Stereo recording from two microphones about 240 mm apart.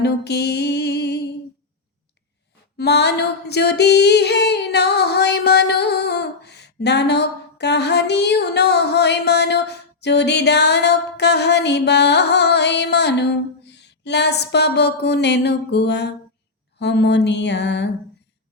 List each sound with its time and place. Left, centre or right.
0.0 s music: left
2.7 s female singing: left